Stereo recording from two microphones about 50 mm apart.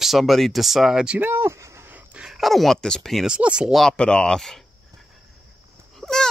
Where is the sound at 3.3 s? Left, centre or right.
Right.